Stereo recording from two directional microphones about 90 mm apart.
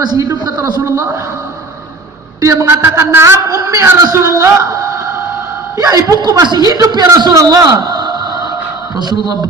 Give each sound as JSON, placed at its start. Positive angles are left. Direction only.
{"t": 0.0, "sound": "a man's voice", "side_deg": -45}
{"t": 2.4, "sound": "a woman's voice", "side_deg": -35}
{"t": 6.4, "sound": "a man's voice", "side_deg": -50}
{"t": 7.2, "sound": "music", "side_deg": -50}